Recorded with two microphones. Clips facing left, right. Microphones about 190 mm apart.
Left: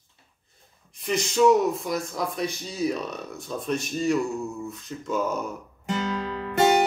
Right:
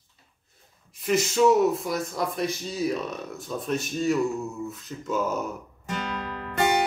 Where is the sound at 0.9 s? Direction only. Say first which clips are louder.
Right 1 dB; 5° right (ahead or behind).